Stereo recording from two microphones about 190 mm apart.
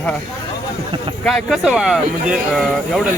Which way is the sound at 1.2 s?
Centre (ahead or behind).